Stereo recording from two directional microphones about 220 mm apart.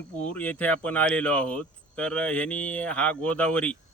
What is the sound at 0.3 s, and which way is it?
Speech, 5° left (ahead or behind).